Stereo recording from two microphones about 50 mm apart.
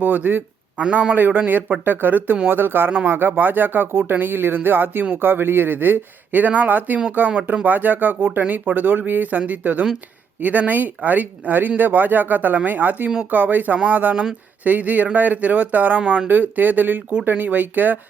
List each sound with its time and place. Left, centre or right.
0.0 s speech: right
0.8 s a man's voice: right
1.1 s speech: right
7.3 s speech: right